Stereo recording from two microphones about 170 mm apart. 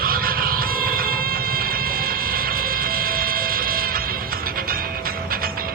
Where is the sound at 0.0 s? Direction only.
60° right (ahead or behind).